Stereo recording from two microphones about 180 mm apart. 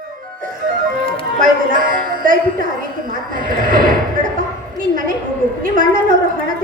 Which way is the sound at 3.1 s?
50° right (ahead or behind).